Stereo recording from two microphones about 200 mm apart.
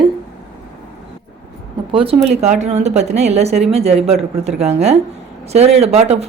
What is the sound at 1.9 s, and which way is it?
Speech, 25° right (ahead or behind).